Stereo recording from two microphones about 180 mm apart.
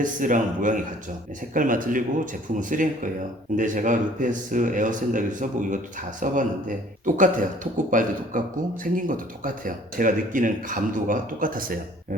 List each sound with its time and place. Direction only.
0.0 s speech: 45° right (ahead or behind)